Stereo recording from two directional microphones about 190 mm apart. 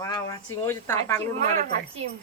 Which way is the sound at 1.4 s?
40° right (ahead or behind).